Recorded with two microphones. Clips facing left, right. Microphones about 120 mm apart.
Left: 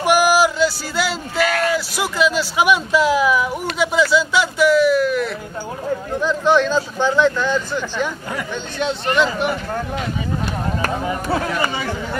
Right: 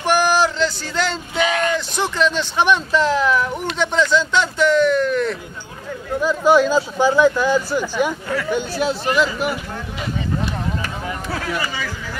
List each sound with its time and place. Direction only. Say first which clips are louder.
0.0 s speech: left 2 dB; 10° left (ahead or behind)
6.2 s speech: right 2 dB; 5° right (ahead or behind)
11.1 s chatter: left 5 dB; 25° left (ahead or behind)
11.7 s speech: left 4 dB; 30° left (ahead or behind)